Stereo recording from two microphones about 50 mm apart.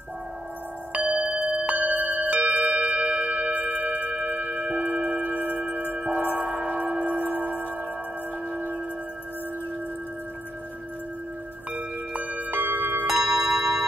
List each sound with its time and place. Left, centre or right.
0.9 s tubular bells: centre
4.6 s singing bowl: right
5.0 s singing bowl: right
11.7 s wind chime: right
13.0 s tubular bells: centre